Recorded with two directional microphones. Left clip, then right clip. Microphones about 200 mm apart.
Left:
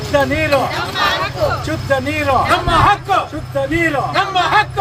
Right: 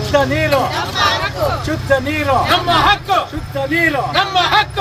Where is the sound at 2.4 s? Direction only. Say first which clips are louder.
Even; 15° right (ahead or behind).